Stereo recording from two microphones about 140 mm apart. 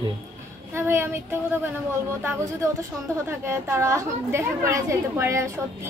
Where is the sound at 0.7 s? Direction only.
15° right (ahead or behind).